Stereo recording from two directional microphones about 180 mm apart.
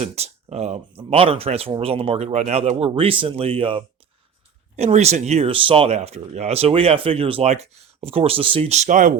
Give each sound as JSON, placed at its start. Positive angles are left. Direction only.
{"t": 0.0, "sound": "speech", "side_deg": -35}